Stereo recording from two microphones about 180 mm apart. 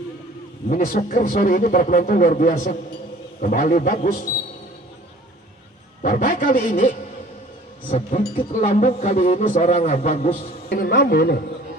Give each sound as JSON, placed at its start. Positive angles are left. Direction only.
{"t": 0.7, "sound": "a man's voice", "side_deg": 50}
{"t": 6.0, "sound": "a man's voice", "side_deg": 55}
{"t": 10.8, "sound": "a man's voice", "side_deg": 55}